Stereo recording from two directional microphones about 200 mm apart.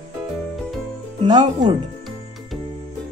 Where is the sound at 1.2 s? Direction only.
20° right (ahead or behind).